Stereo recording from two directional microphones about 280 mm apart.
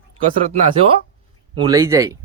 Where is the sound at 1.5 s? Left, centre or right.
Centre.